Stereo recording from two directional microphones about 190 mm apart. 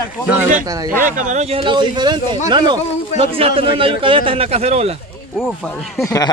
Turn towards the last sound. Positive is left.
turn(degrees=15)  # may be behind; listen again after turning